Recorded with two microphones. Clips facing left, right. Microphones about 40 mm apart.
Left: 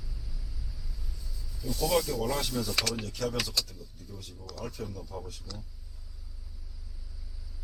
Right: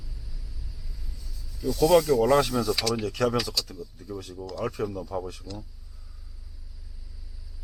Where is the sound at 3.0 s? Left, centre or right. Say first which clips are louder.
Right 8 dB; right.